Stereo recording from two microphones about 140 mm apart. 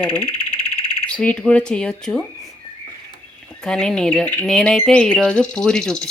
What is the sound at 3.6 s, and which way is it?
Speech, 5° left (ahead or behind).